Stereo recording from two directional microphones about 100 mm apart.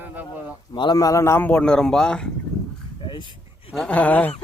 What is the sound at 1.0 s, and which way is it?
Speech, 30° left (ahead or behind).